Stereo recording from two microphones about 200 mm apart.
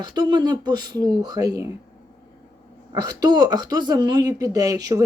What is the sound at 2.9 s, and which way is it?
Speech, 20° right (ahead or behind).